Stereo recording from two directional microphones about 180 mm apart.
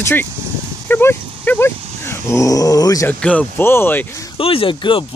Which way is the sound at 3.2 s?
5° left (ahead or behind).